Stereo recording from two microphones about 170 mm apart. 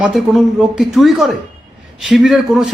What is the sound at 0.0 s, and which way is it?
A man's voice, 5° right (ahead or behind).